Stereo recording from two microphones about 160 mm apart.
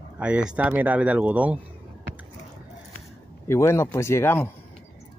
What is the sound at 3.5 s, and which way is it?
Speech, 15° left (ahead or behind).